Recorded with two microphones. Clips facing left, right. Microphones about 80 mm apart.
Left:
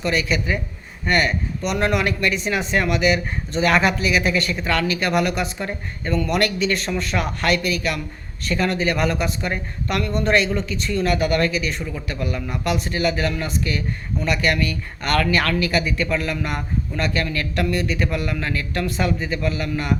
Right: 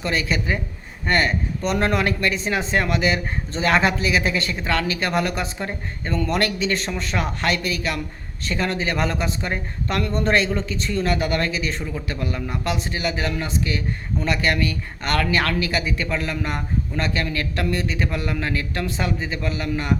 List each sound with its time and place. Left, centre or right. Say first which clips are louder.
0.0 s a man's voice: left 2 dB; right